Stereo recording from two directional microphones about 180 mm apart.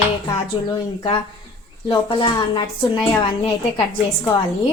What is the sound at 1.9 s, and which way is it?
A woman's voice, 30° left (ahead or behind).